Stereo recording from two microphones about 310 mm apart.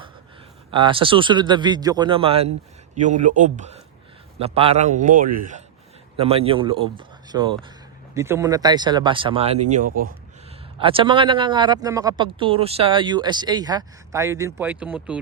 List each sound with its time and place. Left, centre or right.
0.7 s a man's voice: centre